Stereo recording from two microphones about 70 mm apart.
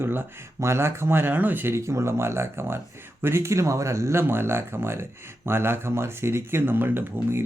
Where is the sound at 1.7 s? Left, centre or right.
Right.